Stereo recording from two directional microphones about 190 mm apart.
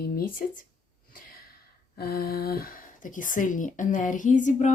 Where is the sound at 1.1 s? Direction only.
50° left (ahead or behind).